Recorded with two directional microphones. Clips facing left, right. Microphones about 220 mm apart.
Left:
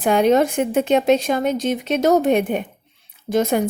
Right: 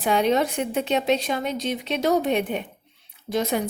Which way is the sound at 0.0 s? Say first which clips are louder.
Left 5 dB; 50° left (ahead or behind).